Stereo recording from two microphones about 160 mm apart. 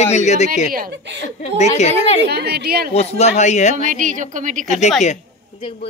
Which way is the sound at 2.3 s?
90° right.